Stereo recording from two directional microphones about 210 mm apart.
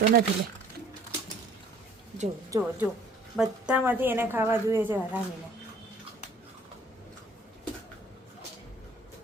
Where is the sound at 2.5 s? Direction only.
10° right (ahead or behind).